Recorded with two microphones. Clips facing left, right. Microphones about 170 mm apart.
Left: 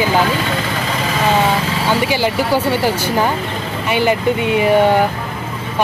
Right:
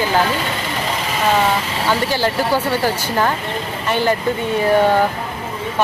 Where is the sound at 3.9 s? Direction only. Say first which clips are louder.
Left 2 dB; 15° left (ahead or behind).